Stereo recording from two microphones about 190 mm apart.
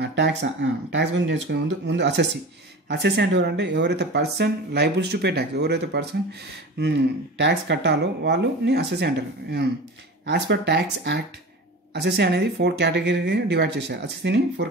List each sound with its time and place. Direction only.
0.0 s speech: 65° right (ahead or behind)